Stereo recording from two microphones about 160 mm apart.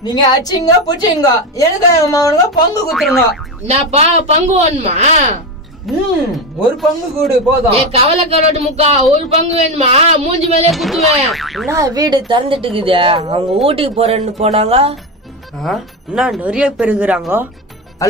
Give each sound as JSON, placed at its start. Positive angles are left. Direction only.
{"t": 0.0, "sound": "a woman's voice", "side_deg": 25}
{"t": 2.9, "sound": "speech", "side_deg": 0}
{"t": 3.6, "sound": "speech", "side_deg": -45}
{"t": 5.9, "sound": "speech", "side_deg": 0}
{"t": 7.7, "sound": "a woman's voice", "side_deg": -40}
{"t": 10.7, "sound": "speech", "side_deg": 0}
{"t": 11.7, "sound": "a woman's voice", "side_deg": -20}
{"t": 16.1, "sound": "speech", "side_deg": -5}